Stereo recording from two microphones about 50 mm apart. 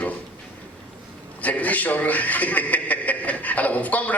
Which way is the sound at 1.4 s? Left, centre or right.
Left.